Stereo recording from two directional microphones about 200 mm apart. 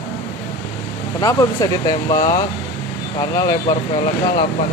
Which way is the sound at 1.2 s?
15° left (ahead or behind).